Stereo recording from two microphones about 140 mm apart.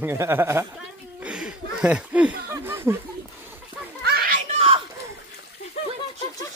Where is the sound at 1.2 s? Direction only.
5° right (ahead or behind).